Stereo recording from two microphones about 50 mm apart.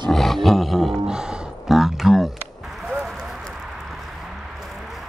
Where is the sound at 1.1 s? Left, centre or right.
Centre.